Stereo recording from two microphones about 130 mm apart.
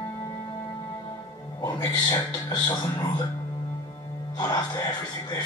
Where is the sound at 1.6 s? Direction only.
25° left (ahead or behind).